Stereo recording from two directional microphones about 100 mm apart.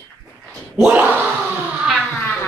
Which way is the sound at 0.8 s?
15° right (ahead or behind).